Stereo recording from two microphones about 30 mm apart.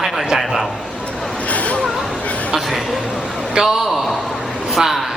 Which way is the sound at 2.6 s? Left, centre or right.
Centre.